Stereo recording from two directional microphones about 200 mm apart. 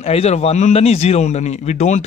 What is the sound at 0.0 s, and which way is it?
A man's voice, 30° left (ahead or behind).